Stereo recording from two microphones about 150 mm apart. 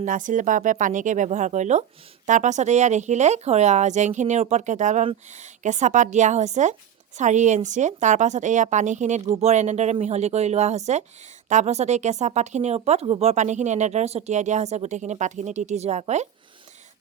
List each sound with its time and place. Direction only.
0.0 s speech: 60° right (ahead or behind)